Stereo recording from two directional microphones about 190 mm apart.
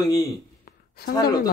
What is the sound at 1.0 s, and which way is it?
Mantra, 55° left (ahead or behind).